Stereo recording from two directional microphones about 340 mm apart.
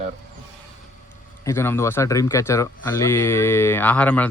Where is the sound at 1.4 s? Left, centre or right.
Centre.